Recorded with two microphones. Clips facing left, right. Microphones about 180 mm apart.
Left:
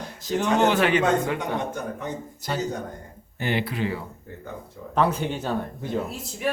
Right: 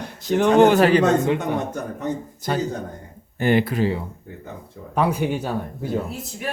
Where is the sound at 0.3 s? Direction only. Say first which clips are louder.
Right 7 dB; 60° right (ahead or behind).